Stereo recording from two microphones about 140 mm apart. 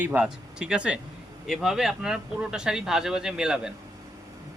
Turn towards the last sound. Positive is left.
turn(degrees=-5)  # may be behind; listen again after turning